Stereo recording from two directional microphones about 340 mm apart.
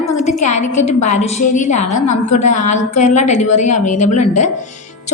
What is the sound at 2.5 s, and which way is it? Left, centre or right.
A woman's voice, left.